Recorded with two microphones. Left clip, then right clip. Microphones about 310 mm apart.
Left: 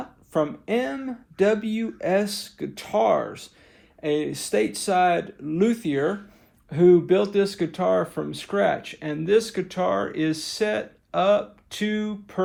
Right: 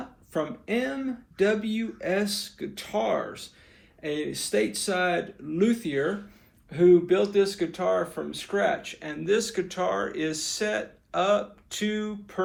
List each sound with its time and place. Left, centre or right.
0.3 s speech: left